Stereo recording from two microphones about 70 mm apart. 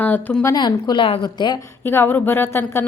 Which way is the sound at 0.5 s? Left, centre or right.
Left.